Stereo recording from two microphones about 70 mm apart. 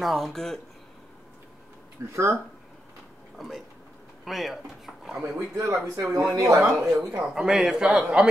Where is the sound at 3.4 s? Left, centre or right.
Centre.